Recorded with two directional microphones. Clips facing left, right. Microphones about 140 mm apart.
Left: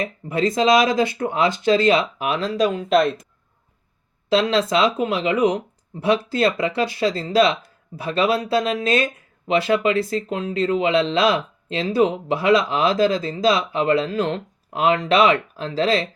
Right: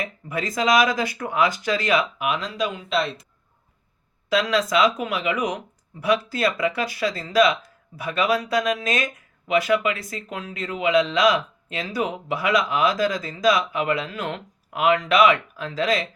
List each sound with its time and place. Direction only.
0.0 s speech: 25° left (ahead or behind); by 3.2 s 50° left (ahead or behind)
4.3 s speech: 30° left (ahead or behind)